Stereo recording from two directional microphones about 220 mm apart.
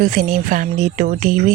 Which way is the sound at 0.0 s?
40° right (ahead or behind).